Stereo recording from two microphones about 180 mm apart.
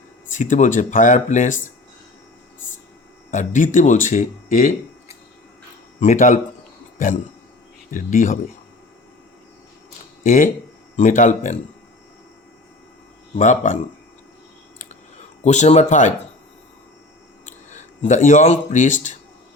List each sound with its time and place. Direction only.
0.3 s speech: 45° left (ahead or behind)
3.3 s speech: 45° left (ahead or behind)
10.2 s speech: 45° left (ahead or behind)
13.3 s speech: 40° left (ahead or behind)
15.4 s speech: 40° left (ahead or behind)
17.7 s speech: 40° left (ahead or behind)